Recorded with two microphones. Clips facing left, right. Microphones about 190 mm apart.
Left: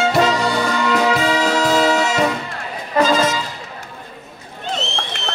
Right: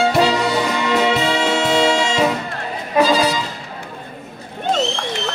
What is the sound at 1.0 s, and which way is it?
Music, 25° right (ahead or behind).